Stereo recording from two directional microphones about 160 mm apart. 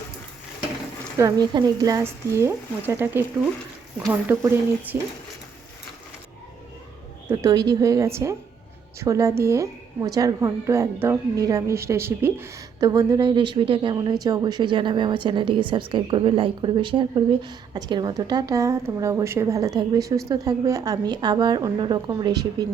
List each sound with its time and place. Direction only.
1.2 s speech: 25° right (ahead or behind)
7.3 s a woman's voice: 20° right (ahead or behind)